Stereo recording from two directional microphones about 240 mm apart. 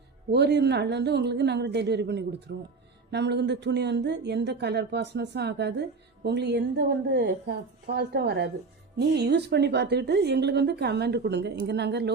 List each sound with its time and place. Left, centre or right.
0.3 s a woman's voice: right